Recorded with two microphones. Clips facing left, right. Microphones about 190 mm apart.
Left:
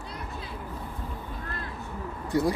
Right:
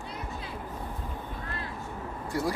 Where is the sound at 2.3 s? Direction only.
20° left (ahead or behind).